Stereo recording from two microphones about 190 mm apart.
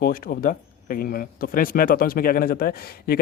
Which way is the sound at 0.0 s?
50° left (ahead or behind).